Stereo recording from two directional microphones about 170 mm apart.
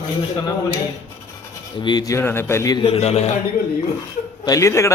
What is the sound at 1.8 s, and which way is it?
A man's voice, 25° left (ahead or behind).